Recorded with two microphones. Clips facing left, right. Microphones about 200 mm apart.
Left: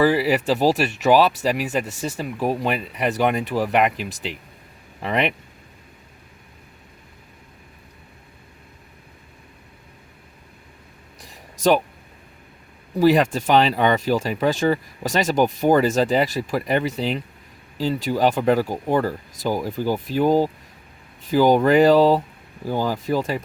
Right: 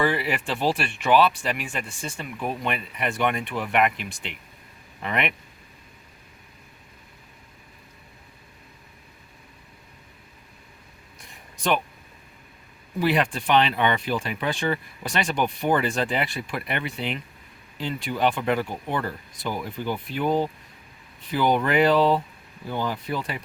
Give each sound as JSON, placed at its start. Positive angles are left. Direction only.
{"t": 0.0, "sound": "speech", "side_deg": 35}
{"t": 11.2, "sound": "a sound", "side_deg": 40}
{"t": 13.0, "sound": "speech", "side_deg": 40}